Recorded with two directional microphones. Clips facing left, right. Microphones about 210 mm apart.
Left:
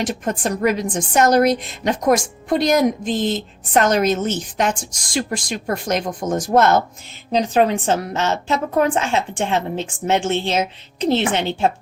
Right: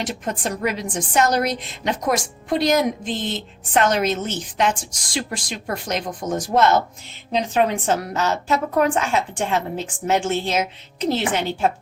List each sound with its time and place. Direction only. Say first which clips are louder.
0.0 s a woman's voice: left 4 dB; 45° left (ahead or behind)
7.3 s a woman's voice: left 3 dB; 35° left (ahead or behind)